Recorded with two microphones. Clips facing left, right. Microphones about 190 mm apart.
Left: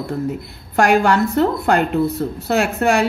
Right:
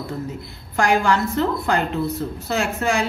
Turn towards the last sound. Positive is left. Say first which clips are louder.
# left 5 dB
turn(degrees=60)  # may be behind; listen again after turning